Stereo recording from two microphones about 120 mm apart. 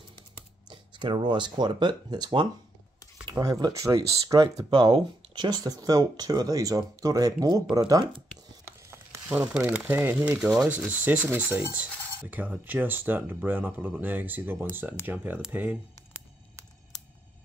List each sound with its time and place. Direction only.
0.7 s speech: 40° right (ahead or behind)
8.6 s a sound: 15° right (ahead or behind)
9.9 s speech: 15° right (ahead or behind)